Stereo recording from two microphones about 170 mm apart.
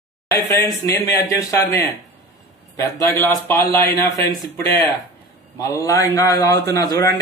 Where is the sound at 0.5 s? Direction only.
15° left (ahead or behind).